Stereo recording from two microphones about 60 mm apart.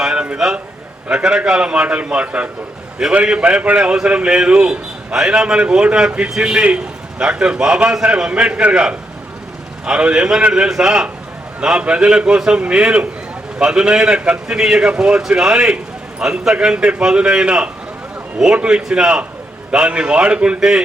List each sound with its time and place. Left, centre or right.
0.0 s a sound: centre
1.1 s a man's voice: centre
16.7 s a man's voice: right